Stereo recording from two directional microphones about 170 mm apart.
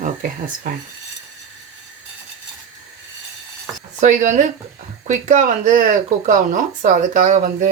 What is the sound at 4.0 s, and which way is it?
Speech, 45° right (ahead or behind).